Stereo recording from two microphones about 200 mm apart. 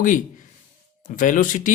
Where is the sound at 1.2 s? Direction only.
40° left (ahead or behind).